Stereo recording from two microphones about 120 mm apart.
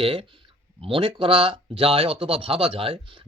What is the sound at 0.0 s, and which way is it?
Speech, 50° right (ahead or behind).